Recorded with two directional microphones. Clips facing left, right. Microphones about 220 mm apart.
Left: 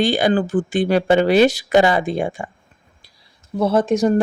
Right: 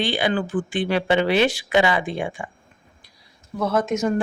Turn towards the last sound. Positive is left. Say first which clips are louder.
# left 5 dB
turn(degrees=35)  # may be behind; listen again after turning